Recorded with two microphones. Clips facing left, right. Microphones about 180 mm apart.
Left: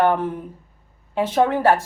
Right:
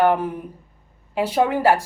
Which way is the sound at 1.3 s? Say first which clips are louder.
Left 1 dB; 10° right (ahead or behind).